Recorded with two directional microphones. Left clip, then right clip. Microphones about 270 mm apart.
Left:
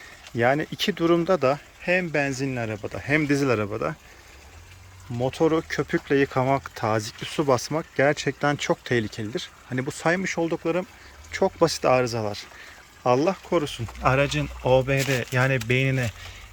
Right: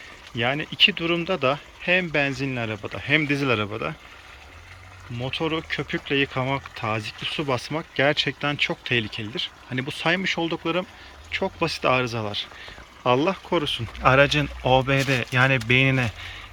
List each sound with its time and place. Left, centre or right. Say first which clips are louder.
0.3 s speech: even; left
5.2 s speech: left 4 dB; left
11.3 s speech: left 4 dB; left; by 16.4 s centre